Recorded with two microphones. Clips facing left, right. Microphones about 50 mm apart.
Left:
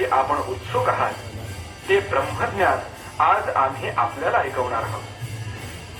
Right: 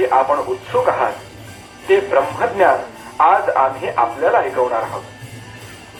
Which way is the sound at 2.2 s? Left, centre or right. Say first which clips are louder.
Right 6 dB; centre.